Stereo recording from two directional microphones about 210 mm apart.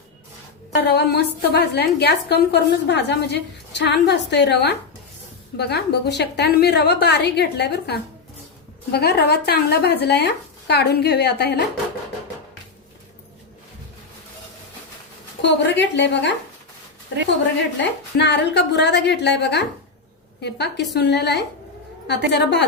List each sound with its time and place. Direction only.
0.7 s a woman's voice: 50° left (ahead or behind)
15.4 s a woman's voice: 60° left (ahead or behind)
17.7 s a woman's voice: 55° left (ahead or behind)